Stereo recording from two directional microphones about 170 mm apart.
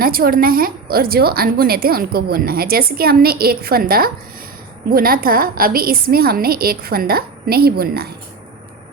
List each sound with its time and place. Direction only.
0.0 s a woman's voice: 60° right (ahead or behind)